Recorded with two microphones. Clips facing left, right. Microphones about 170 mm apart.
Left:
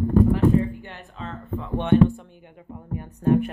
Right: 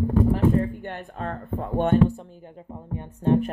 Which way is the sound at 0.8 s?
55° right (ahead or behind).